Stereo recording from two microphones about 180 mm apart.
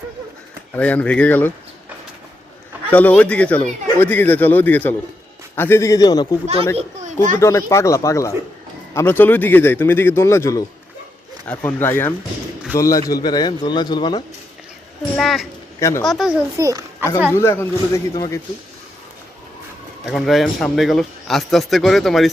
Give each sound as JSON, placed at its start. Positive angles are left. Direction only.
{"t": 0.8, "sound": "speech", "side_deg": 10}
{"t": 2.9, "sound": "speech", "side_deg": 10}
{"t": 6.7, "sound": "a child's voice", "side_deg": -40}
{"t": 7.3, "sound": "speech", "side_deg": 15}
{"t": 11.6, "sound": "speech", "side_deg": 10}
{"t": 15.1, "sound": "a man's voice", "side_deg": 0}
{"t": 15.8, "sound": "speech", "side_deg": 15}
{"t": 16.0, "sound": "a man's voice", "side_deg": 0}
{"t": 16.6, "sound": "a child's voice", "side_deg": -20}
{"t": 17.3, "sound": "speech", "side_deg": 15}
{"t": 20.1, "sound": "a man's voice", "side_deg": 0}